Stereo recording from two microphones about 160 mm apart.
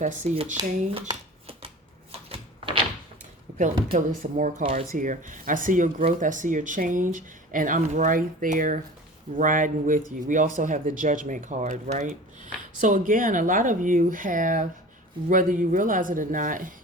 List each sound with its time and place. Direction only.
0.0 s speech: 50° right (ahead or behind)
0.5 s speech: 30° right (ahead or behind)
2.1 s a sound: 35° right (ahead or behind)
3.9 s speech: 55° right (ahead or behind)
4.6 s speech: 40° right (ahead or behind)
4.9 s speech: 55° right (ahead or behind)